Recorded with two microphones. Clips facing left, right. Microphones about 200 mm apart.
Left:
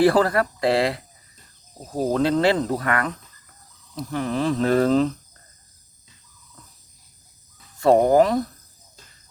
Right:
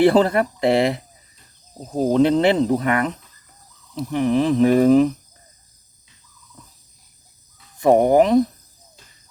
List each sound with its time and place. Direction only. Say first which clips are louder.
0.0 s speech: right 3 dB; 25° right (ahead or behind)
7.8 s speech: right 1 dB; 15° right (ahead or behind)